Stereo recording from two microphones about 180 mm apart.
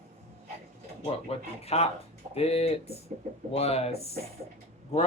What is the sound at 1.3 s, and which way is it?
Speech, 35° left (ahead or behind).